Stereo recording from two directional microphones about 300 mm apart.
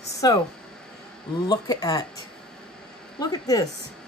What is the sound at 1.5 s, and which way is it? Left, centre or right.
A woman's voice, centre.